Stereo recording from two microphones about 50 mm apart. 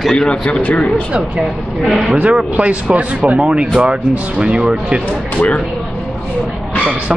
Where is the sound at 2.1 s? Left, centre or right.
Right.